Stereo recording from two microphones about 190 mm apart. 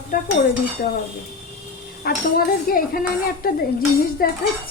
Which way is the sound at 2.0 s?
50° left (ahead or behind).